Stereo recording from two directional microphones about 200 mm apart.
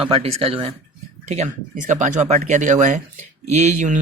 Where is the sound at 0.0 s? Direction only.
30° right (ahead or behind).